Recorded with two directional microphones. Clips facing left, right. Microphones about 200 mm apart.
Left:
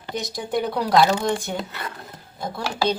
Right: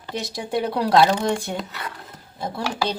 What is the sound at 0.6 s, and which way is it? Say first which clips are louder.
Speech: right 1 dB; 5° right (ahead or behind).